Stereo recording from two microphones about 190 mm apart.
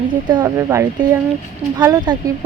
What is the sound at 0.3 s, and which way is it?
Speech, 20° right (ahead or behind).